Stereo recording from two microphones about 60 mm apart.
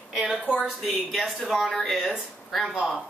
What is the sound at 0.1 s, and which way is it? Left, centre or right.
A woman's voice, centre.